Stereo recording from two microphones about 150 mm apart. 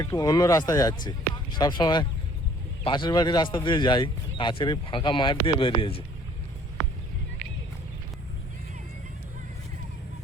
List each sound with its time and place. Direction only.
0.0 s a man's voice: 25° left (ahead or behind)